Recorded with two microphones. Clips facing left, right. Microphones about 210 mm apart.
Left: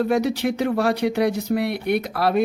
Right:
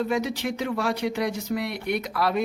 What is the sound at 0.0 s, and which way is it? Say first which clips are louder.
Speech: left 6 dB; 65° left (ahead or behind).